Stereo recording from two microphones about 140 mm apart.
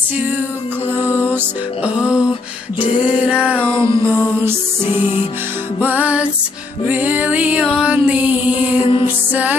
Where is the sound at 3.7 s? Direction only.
35° left (ahead or behind).